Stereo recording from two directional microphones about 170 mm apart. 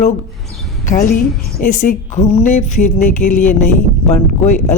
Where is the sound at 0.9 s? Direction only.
55° left (ahead or behind).